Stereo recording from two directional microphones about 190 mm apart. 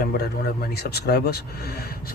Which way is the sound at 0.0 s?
55° left (ahead or behind).